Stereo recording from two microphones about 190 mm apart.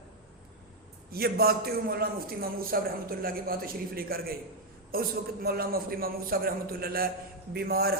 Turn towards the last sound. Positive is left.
turn(degrees=-55)  # may be behind; listen again after turning